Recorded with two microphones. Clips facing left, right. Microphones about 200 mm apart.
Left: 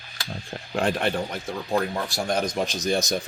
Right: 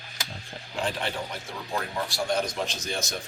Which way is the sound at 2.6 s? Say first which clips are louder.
Left 5 dB; 50° left (ahead or behind).